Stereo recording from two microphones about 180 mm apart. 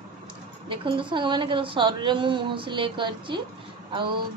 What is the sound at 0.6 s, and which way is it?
A woman's voice, 30° right (ahead or behind).